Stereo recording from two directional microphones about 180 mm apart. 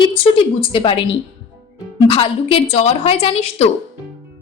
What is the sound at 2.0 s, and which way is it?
A woman's voice, 30° left (ahead or behind).